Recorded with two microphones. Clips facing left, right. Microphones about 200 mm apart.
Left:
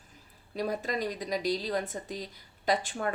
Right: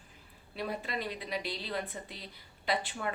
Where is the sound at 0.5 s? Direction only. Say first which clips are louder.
Left 5 dB; 40° left (ahead or behind).